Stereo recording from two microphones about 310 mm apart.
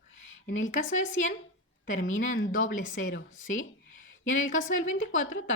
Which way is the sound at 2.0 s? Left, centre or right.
Left.